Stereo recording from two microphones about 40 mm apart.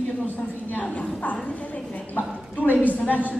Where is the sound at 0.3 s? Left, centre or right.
Left.